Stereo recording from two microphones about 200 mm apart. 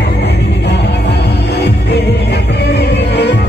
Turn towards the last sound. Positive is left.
turn(degrees=55)  # may be behind; listen again after turning